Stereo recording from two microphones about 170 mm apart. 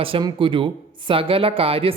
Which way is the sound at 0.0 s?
30° right (ahead or behind).